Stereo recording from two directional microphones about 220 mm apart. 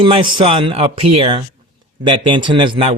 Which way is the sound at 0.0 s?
20° right (ahead or behind).